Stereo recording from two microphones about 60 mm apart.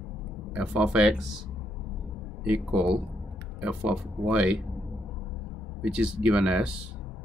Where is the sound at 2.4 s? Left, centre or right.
Centre.